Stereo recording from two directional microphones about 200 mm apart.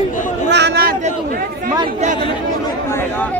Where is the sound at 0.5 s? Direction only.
55° right (ahead or behind).